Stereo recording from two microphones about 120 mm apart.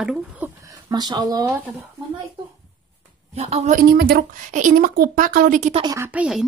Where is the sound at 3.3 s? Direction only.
60° right (ahead or behind).